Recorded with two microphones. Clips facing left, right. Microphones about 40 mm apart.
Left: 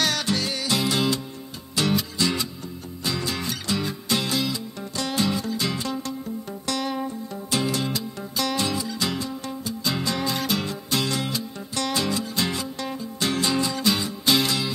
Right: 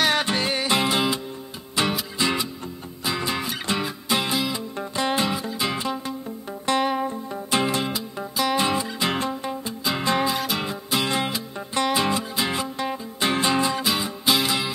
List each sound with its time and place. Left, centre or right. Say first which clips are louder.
0.1 s music: right 3 dB; right
7.9 s music: right 1 dB; centre
10.2 s music: right 1 dB; centre; by 13.8 s right
13.8 s music: even; centre